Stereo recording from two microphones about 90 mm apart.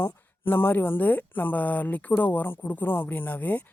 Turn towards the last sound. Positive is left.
turn(degrees=20)  # may be behind; listen again after turning